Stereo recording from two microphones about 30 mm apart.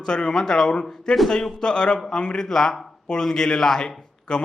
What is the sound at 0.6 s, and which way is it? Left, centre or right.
A man's voice, left.